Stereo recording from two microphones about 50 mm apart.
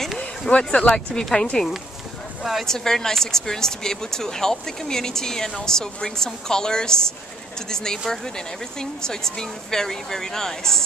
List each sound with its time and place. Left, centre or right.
0.2 s speech: left